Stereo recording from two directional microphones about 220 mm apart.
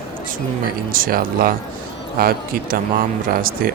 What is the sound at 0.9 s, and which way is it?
Speech, 40° right (ahead or behind).